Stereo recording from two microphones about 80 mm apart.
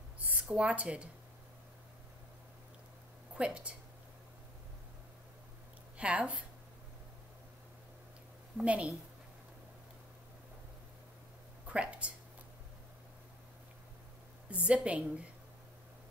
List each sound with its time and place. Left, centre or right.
0.3 s speech: centre
3.3 s a woman's voice: centre
5.9 s speech: centre
8.5 s a woman's voice: centre
11.6 s a sound: centre
14.6 s a woman's voice: centre